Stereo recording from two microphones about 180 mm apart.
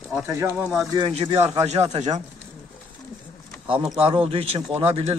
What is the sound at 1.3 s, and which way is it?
Speech, 20° right (ahead or behind).